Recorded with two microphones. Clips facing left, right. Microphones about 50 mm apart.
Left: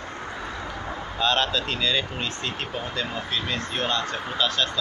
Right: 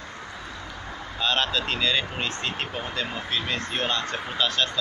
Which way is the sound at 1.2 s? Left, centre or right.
Centre.